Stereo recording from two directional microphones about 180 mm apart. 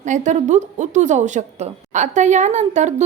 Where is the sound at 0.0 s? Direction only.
40° right (ahead or behind).